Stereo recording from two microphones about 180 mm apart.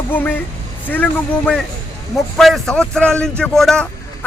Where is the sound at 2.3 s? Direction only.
Centre (ahead or behind).